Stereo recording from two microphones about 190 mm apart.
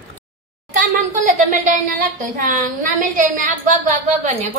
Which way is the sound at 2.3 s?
45° right (ahead or behind).